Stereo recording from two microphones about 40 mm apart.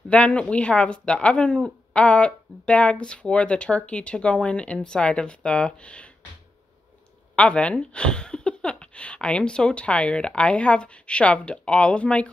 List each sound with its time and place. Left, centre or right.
0.1 s speech: left
7.3 s speech: left